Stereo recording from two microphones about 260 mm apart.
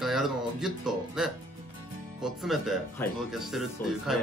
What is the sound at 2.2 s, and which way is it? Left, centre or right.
Speech, centre.